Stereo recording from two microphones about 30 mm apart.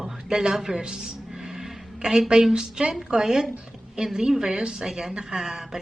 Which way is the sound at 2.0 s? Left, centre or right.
Right.